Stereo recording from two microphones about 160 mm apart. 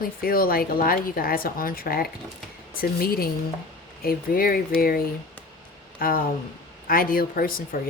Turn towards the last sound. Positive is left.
turn(degrees=65)  # may be behind; listen again after turning